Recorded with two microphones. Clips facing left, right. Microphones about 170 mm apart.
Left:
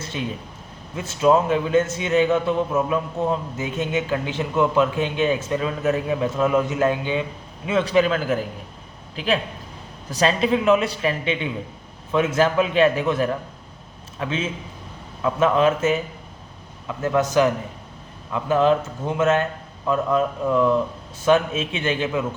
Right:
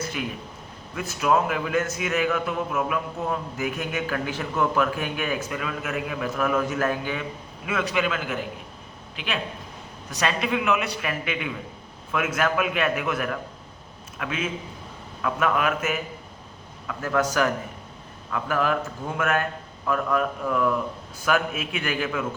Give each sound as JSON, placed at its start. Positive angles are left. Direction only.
{"t": 0.9, "sound": "a man's voice", "side_deg": 25}